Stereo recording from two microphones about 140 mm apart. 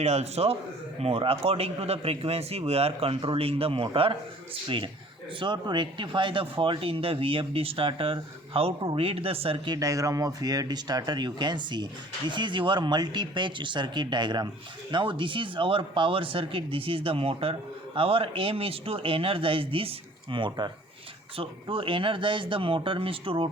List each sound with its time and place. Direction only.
0.0 s a man's voice: 50° right (ahead or behind)
5.4 s speech: 35° right (ahead or behind)
9.7 s speech: 25° right (ahead or behind); by 23.5 s 40° right (ahead or behind)